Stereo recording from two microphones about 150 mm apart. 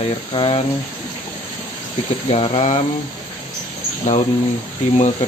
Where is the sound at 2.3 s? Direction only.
45° left (ahead or behind).